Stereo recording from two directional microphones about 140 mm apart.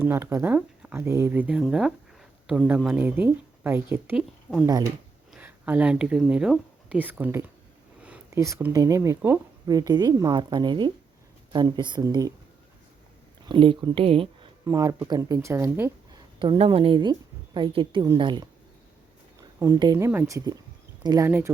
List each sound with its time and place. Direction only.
0.0 s speech: 15° right (ahead or behind)
4.5 s speech: 15° left (ahead or behind)
5.3 s a woman's voice: 10° right (ahead or behind); by 12.3 s 25° right (ahead or behind)
13.5 s speech: 35° right (ahead or behind)
14.6 s a woman's voice: 25° right (ahead or behind)
16.1 s speech: 35° right (ahead or behind)
19.4 s a woman's voice: 20° right (ahead or behind)
21.2 s speech: 15° right (ahead or behind)